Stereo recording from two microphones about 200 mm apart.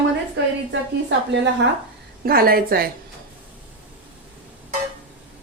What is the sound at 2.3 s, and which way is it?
Speech, 50° right (ahead or behind).